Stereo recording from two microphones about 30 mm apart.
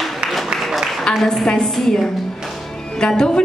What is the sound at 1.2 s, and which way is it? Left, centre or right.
Speech, centre.